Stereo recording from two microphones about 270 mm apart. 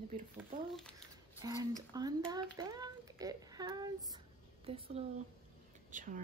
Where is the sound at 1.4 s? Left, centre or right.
Centre.